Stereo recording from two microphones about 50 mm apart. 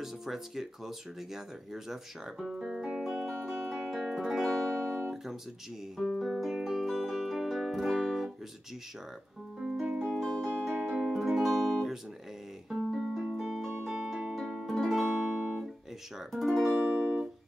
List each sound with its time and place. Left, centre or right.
0.0 s speech: centre
3.7 s music: centre
5.1 s guitar: centre
5.9 s music: centre
9.8 s music: centre
10.2 s music: centre
10.7 s music: centre
16.3 s speech: centre
16.8 s music: right